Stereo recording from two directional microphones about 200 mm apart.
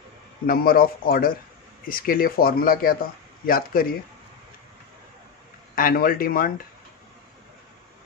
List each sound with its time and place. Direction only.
0.5 s speech: 45° left (ahead or behind)
5.8 s speech: 45° left (ahead or behind)